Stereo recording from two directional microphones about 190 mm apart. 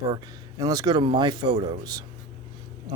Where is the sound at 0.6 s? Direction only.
20° right (ahead or behind).